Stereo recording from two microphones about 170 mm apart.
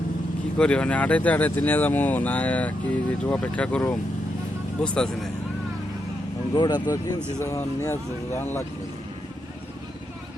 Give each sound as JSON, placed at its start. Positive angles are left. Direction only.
{"t": 0.6, "sound": "speech", "side_deg": 5}
{"t": 6.5, "sound": "speech", "side_deg": 25}